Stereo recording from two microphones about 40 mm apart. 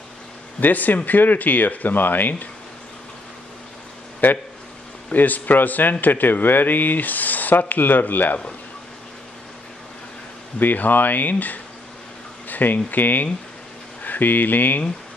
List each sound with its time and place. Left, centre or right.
0.6 s speech: left
4.2 s speech: left
10.6 s speech: left